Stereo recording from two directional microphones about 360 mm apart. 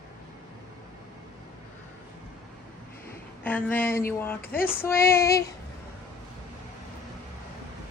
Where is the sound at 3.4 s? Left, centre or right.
Centre.